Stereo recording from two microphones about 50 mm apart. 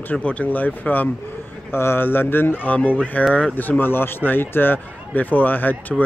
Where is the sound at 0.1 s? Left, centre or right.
Left.